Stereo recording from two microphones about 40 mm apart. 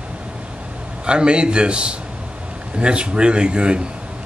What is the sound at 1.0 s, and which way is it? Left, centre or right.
A man's voice, right.